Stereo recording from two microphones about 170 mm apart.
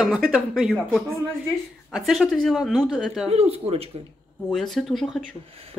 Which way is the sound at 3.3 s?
35° right (ahead or behind).